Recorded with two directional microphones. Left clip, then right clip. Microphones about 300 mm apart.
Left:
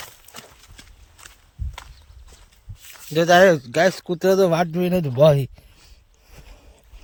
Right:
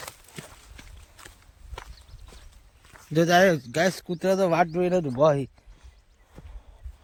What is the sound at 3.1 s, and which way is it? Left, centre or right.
Speech, centre.